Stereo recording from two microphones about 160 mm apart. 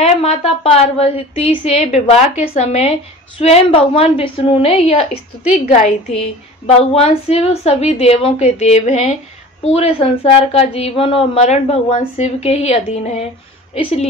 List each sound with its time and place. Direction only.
0.0 s a woman's voice: 40° left (ahead or behind)